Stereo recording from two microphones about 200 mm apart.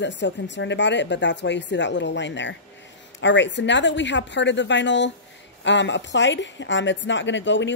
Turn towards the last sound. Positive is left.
turn(degrees=65)  # may be behind; listen again after turning